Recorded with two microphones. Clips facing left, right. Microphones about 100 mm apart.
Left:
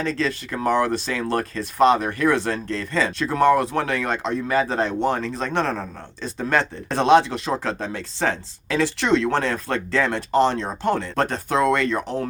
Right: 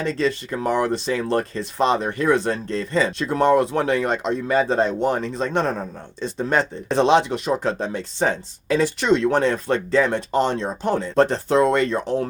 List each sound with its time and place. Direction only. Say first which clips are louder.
0.0 s speech: right 2 dB; 20° right (ahead or behind)